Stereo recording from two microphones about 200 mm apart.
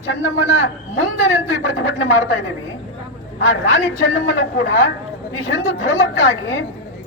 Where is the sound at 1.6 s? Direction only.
70° left (ahead or behind).